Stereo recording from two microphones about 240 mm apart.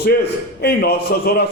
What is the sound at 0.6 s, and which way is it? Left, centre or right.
Speech, left.